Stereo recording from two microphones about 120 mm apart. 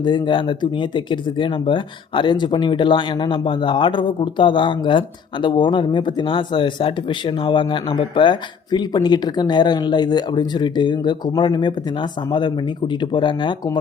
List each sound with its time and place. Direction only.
0.0 s speech: 40° left (ahead or behind)